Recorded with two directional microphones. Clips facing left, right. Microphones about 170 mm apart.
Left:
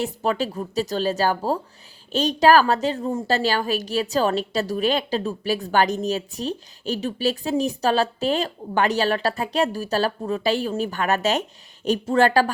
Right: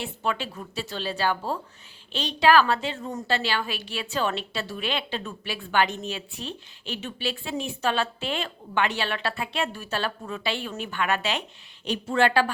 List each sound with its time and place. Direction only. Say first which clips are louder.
0.0 s a woman's voice: left 6 dB; 40° left (ahead or behind)